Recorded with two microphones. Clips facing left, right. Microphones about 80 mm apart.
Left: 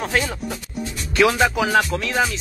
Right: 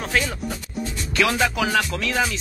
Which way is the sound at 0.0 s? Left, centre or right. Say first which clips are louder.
Left 1 dB; centre.